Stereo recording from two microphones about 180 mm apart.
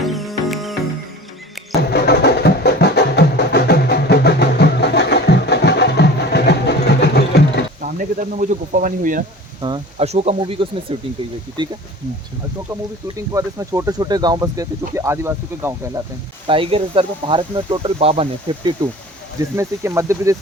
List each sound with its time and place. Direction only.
0.0 s music: centre (ahead or behind)
1.9 s music: 65° left (ahead or behind)
7.8 s speech: 45° right (ahead or behind)
9.6 s speech: 25° right (ahead or behind)
10.0 s speech: 35° right (ahead or behind)
13.1 s speech: 20° right (ahead or behind)
16.5 s speech: 30° right (ahead or behind)
19.5 s speech: 15° right (ahead or behind)